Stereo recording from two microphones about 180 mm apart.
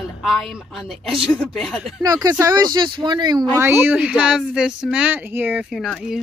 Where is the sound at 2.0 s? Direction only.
20° right (ahead or behind).